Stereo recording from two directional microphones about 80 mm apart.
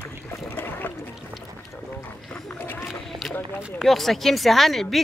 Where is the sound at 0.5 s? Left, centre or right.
Left.